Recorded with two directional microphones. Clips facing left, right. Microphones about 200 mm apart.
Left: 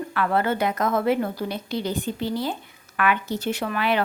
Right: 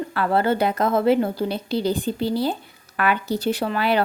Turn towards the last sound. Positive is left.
turn(degrees=-35)  # may be behind; listen again after turning